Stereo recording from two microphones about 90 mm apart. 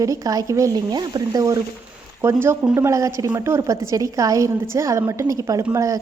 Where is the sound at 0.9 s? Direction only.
50° right (ahead or behind).